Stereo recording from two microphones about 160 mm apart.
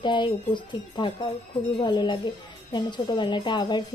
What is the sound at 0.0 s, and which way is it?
A woman's voice, 30° left (ahead or behind).